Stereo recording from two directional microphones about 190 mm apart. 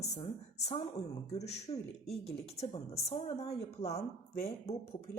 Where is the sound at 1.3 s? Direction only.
35° left (ahead or behind).